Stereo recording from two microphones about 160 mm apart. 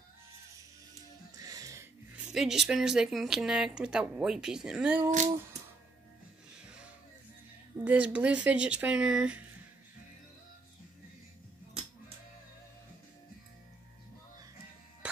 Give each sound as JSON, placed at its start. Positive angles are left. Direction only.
{"t": 1.4, "sound": "music", "side_deg": -20}
{"t": 2.1, "sound": "speech", "side_deg": -5}
{"t": 5.1, "sound": "music", "side_deg": -50}
{"t": 7.8, "sound": "speech", "side_deg": -10}